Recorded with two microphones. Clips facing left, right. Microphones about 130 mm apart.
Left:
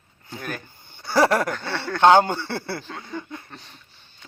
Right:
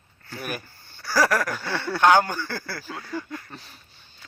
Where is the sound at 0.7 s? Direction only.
20° left (ahead or behind).